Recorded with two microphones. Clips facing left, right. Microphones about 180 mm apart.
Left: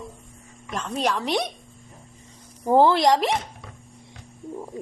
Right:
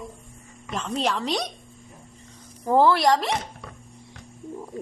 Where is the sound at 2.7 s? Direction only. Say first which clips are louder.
Left 1 dB; 20° left (ahead or behind).